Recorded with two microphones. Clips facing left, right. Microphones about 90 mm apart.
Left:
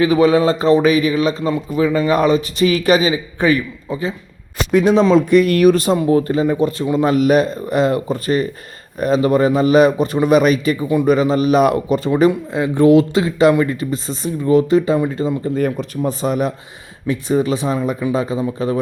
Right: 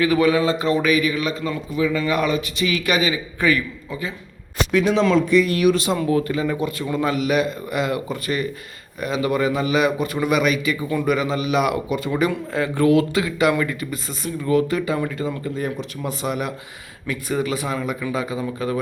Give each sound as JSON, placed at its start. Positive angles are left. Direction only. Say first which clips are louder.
{"t": 0.0, "sound": "a man's voice", "louder": "left 5 dB", "side_deg": 25}
{"t": 4.7, "sound": "a man's voice", "louder": "left 6 dB", "side_deg": 35}
{"t": 5.1, "sound": "speech", "louder": "left 5 dB", "side_deg": 55}
{"t": 5.6, "sound": "a man's voice", "louder": "left 6 dB", "side_deg": 40}
{"t": 12.3, "sound": "a man's voice", "louder": "left 4 dB", "side_deg": 20}
{"t": 15.5, "sound": "speech", "louder": "left 7 dB", "side_deg": 50}
{"t": 16.0, "sound": "a man's voice", "louder": "left 6 dB", "side_deg": 35}